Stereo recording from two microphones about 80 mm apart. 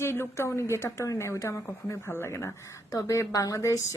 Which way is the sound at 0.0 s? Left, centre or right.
Left.